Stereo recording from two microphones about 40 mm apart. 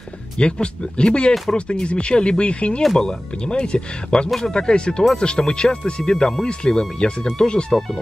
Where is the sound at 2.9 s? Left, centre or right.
Centre.